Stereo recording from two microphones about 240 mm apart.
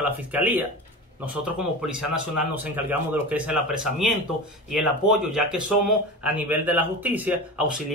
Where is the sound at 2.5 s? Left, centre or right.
Centre.